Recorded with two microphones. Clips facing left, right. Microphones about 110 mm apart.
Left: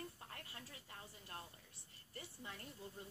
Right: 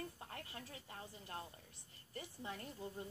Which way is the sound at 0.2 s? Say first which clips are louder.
Right 4 dB; 25° right (ahead or behind).